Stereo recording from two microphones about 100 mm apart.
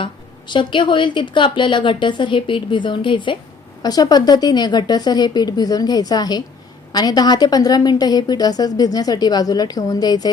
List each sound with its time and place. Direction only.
0.0 s a woman's voice: 50° left (ahead or behind)
3.8 s a woman's voice: 40° left (ahead or behind)